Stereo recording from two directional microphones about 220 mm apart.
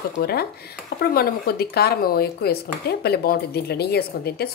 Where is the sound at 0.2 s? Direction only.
45° left (ahead or behind).